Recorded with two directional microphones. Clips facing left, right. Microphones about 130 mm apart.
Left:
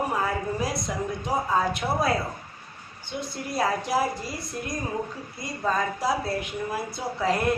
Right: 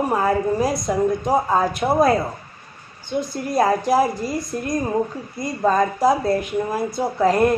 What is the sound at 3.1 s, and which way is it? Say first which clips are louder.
Speech: right 9 dB; 45° right (ahead or behind).